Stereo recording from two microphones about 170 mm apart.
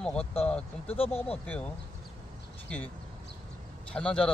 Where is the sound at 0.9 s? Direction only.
35° left (ahead or behind).